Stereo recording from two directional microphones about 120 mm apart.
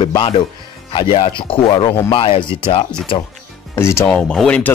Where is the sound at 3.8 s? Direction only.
20° left (ahead or behind).